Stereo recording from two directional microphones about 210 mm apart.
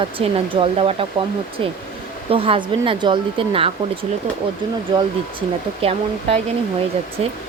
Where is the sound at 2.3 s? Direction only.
25° right (ahead or behind).